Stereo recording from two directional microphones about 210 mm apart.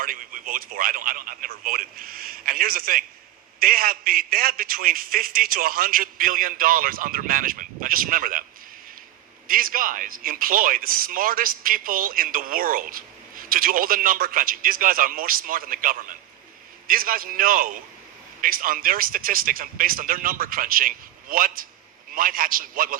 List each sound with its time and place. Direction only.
0.0 s speech: 40° right (ahead or behind)
9.5 s speech: 40° right (ahead or behind)